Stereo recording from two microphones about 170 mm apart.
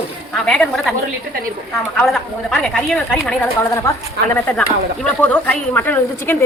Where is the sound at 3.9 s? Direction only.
15° left (ahead or behind).